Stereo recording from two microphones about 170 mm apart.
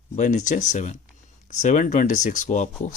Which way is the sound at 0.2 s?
45° left (ahead or behind).